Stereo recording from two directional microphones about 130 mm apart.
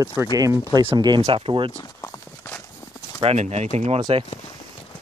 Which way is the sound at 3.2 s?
55° right (ahead or behind).